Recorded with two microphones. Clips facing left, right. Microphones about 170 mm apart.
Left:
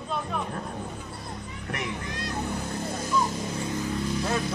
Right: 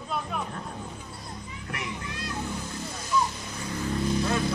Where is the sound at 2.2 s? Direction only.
50° left (ahead or behind).